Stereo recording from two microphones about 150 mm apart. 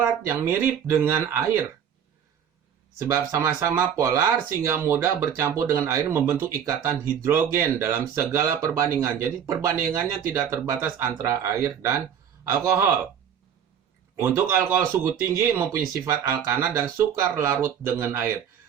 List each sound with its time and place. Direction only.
0.3 s speech: 15° right (ahead or behind)
3.0 s speech: 20° right (ahead or behind)
14.2 s speech: 15° right (ahead or behind)